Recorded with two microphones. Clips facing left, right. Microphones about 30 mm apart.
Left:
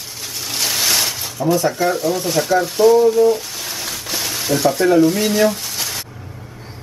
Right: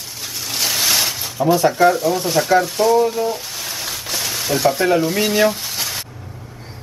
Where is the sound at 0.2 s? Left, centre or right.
Centre.